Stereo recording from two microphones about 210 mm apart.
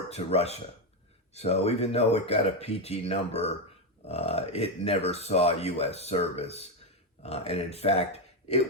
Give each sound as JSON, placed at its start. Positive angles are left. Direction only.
{"t": 0.1, "sound": "speech", "side_deg": 30}